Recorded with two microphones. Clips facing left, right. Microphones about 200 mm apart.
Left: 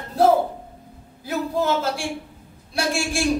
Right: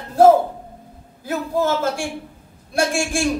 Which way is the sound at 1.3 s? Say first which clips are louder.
Right 2 dB; 50° right (ahead or behind).